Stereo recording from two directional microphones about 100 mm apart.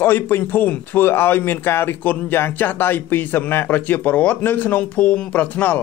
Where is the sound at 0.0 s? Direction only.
20° left (ahead or behind).